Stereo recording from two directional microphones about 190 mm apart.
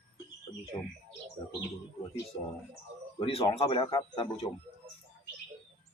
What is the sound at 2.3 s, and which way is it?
A man's voice, 30° left (ahead or behind).